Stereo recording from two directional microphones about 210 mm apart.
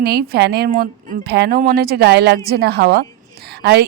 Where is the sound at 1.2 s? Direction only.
50° right (ahead or behind).